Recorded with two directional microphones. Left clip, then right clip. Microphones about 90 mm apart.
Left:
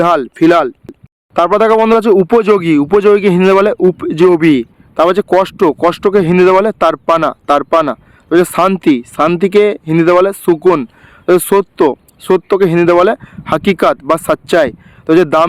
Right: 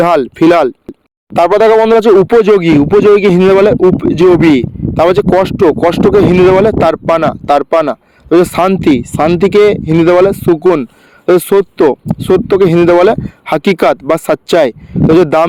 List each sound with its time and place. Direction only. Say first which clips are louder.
0.0 s speech: right 2 dB; 30° right (ahead or behind)
0.3 s speech: right 2 dB; 50° right (ahead or behind)
1.5 s speech: right 3 dB; 30° right (ahead or behind)
3.2 s speech: right 2 dB; 30° right (ahead or behind)
11.9 s speech: right 2 dB; 30° right (ahead or behind)